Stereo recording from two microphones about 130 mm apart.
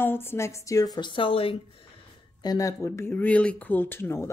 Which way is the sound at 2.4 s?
30° left (ahead or behind).